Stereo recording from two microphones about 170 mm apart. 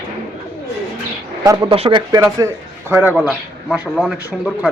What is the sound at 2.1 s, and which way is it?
A man's voice, 20° right (ahead or behind).